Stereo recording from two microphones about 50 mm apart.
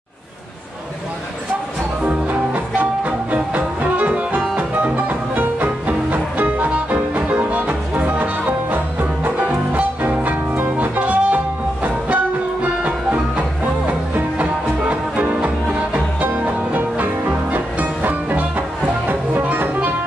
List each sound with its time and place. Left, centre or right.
2.0 s music: right
9.5 s music: right
13.8 s music: right